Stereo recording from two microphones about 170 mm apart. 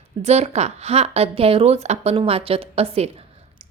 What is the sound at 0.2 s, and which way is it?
A woman's voice, 40° right (ahead or behind).